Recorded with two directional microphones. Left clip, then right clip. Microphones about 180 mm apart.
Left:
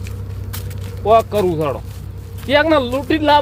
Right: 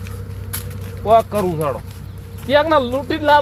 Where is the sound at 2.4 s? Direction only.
35° left (ahead or behind).